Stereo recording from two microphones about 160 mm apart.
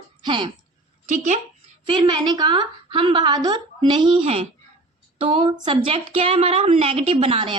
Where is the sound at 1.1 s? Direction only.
50° right (ahead or behind).